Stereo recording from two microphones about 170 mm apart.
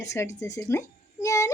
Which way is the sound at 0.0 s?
15° left (ahead or behind).